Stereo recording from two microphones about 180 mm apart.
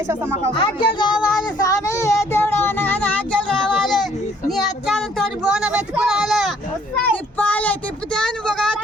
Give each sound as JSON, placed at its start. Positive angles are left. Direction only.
{"t": 0.1, "sound": "speech", "side_deg": -15}
{"t": 0.5, "sound": "speech", "side_deg": 25}
{"t": 1.5, "sound": "a sound", "side_deg": 20}